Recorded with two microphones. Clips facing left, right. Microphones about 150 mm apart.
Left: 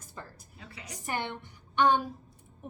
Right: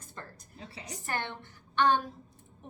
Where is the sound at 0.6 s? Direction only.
30° right (ahead or behind).